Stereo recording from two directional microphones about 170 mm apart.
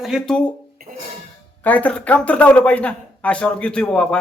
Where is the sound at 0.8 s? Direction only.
60° right (ahead or behind).